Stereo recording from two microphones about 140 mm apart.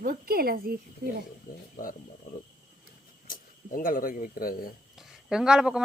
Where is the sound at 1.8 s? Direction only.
90° left.